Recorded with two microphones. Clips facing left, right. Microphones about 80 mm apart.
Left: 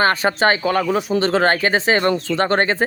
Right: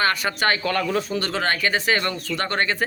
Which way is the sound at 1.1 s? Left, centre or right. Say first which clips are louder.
Left 8 dB; left.